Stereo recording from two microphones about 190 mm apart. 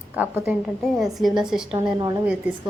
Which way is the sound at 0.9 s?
Centre (ahead or behind).